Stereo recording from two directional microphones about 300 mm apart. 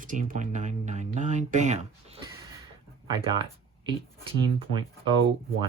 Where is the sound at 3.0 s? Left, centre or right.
Centre.